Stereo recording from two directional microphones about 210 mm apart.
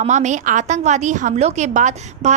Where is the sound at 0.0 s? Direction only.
35° right (ahead or behind).